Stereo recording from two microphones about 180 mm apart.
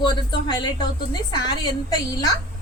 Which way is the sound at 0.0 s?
25° left (ahead or behind).